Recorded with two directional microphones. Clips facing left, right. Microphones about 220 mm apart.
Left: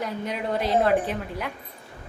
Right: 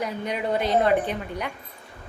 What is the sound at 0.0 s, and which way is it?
A woman's voice, centre (ahead or behind).